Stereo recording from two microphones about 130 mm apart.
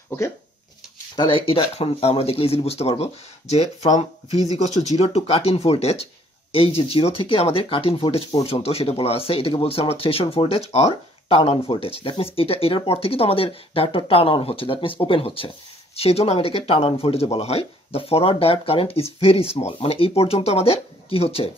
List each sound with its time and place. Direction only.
1.1 s speech: 40° left (ahead or behind); by 4.0 s 60° left (ahead or behind)
4.3 s speech: 30° right (ahead or behind)
4.9 s speech: 50° left (ahead or behind)